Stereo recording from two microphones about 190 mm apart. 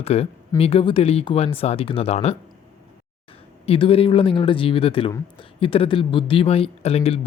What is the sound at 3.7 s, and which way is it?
Speech, 30° left (ahead or behind).